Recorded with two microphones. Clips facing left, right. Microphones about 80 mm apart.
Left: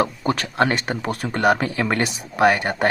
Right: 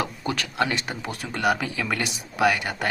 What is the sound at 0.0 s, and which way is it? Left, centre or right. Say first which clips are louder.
A man's voice: left 6 dB; left.